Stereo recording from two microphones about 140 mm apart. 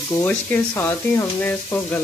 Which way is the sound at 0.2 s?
15° left (ahead or behind).